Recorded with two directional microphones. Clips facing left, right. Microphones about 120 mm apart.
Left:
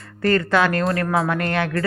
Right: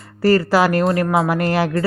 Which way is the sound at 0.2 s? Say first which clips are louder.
Right 4 dB; 30° right (ahead or behind).